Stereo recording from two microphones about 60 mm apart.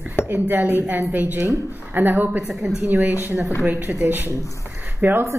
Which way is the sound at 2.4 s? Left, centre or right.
Centre.